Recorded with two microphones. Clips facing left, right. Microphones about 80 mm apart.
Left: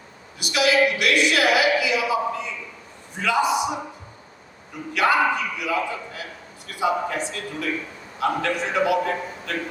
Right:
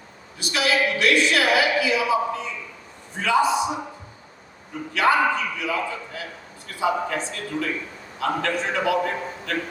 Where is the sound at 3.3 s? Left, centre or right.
Right.